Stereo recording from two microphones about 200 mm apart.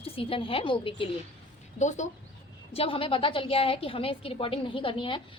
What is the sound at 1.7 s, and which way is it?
Speech, 35° left (ahead or behind).